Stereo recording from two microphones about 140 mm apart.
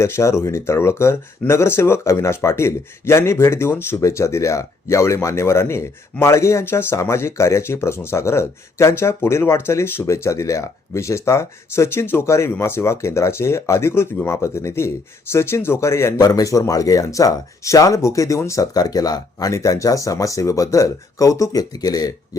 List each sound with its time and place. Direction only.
0.0 s speech: 20° left (ahead or behind)